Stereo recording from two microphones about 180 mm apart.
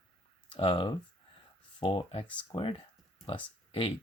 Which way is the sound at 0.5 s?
30° left (ahead or behind).